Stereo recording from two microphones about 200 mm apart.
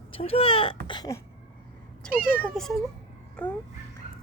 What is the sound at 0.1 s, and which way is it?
Speech, 30° left (ahead or behind).